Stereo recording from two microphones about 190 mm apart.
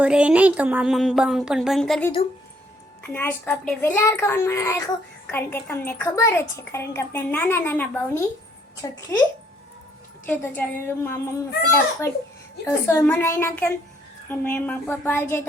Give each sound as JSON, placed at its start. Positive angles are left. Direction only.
{"t": 0.0, "sound": "a sound", "side_deg": -5}
{"t": 3.0, "sound": "a woman's voice", "side_deg": 10}
{"t": 10.2, "sound": "a woman's voice", "side_deg": 10}